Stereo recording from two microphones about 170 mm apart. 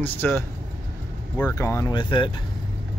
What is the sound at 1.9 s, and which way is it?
Speech, 30° left (ahead or behind).